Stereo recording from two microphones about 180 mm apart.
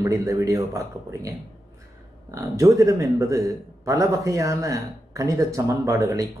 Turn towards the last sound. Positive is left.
turn(degrees=-20)  # may be behind; listen again after turning